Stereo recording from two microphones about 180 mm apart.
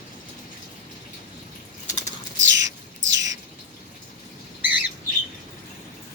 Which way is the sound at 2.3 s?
90° right.